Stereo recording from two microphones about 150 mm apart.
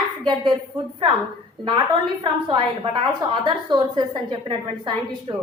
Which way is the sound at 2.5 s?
35° right (ahead or behind).